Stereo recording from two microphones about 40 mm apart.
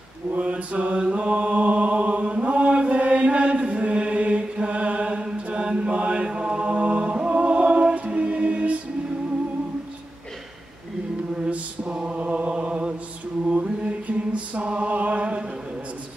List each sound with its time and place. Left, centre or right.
0.4 s mantra: right
5.5 s chant: right
8.1 s choir: right
11.9 s mantra: right
12.2 s chant: right
13.5 s mantra: right